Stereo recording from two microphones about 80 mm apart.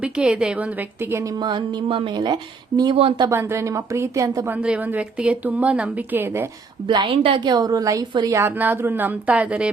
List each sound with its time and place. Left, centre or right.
0.0 s a woman's voice: centre
1.5 s speech: right
3.2 s a woman's voice: right
4.6 s a woman's voice: centre
6.8 s speech: right
8.4 s speech: right